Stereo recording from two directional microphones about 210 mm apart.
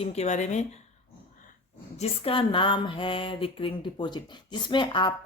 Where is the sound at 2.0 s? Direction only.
25° left (ahead or behind).